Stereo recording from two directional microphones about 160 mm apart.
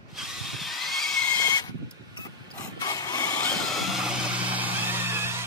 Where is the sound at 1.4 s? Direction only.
25° left (ahead or behind).